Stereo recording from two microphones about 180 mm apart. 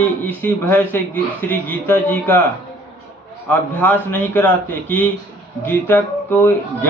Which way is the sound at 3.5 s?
10° left (ahead or behind).